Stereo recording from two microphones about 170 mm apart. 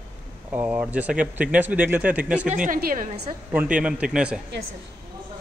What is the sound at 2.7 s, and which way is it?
Speech, 55° right (ahead or behind).